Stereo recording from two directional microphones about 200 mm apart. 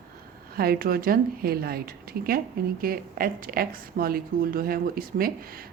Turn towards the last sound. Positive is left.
turn(degrees=-45)  # may be behind; listen again after turning